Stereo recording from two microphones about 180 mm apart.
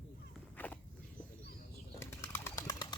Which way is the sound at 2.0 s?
15° left (ahead or behind).